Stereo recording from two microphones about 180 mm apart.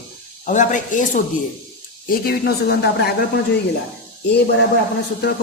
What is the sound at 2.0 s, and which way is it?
Speech, 55° left (ahead or behind).